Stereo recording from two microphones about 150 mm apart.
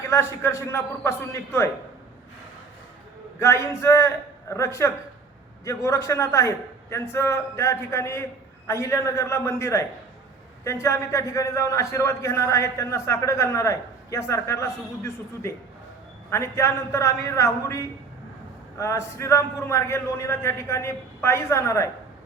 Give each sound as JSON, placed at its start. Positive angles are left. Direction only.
{"t": 0.1, "sound": "a man's voice", "side_deg": 20}
{"t": 3.4, "sound": "a man's voice", "side_deg": 20}